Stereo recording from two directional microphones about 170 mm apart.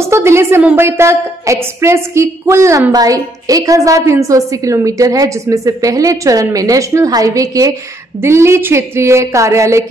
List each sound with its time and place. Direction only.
0.1 s a woman's voice: 15° right (ahead or behind)